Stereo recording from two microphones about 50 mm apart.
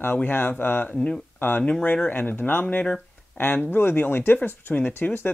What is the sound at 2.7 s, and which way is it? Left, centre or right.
Speech, left.